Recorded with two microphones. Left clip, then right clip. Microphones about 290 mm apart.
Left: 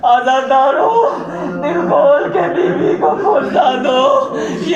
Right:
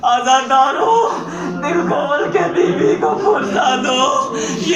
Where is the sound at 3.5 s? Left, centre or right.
Right.